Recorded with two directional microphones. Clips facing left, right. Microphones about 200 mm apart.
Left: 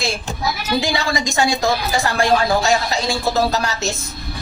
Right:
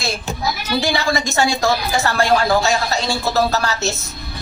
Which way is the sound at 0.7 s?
20° left (ahead or behind).